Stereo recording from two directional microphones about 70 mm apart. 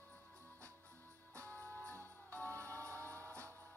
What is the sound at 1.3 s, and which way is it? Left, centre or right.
Music, left.